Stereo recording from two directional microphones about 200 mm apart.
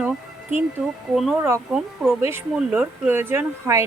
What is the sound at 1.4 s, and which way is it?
Speech, 10° right (ahead or behind).